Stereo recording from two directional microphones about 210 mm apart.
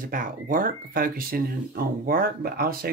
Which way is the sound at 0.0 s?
40° right (ahead or behind).